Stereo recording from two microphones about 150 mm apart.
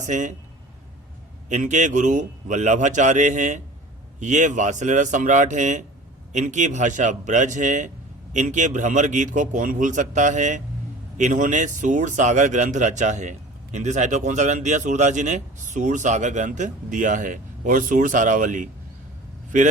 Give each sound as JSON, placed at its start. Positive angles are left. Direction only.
{"t": 0.0, "sound": "speech", "side_deg": -55}
{"t": 1.5, "sound": "a man's voice", "side_deg": -55}